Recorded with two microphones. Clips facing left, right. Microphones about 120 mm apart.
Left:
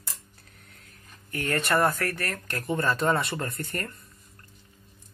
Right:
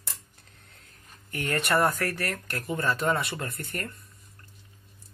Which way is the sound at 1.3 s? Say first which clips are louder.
Left 1 dB; 15° right (ahead or behind).